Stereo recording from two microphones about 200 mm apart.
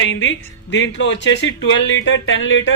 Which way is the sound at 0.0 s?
70° left (ahead or behind).